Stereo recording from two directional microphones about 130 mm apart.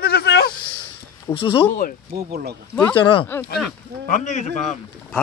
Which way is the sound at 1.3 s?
45° left (ahead or behind).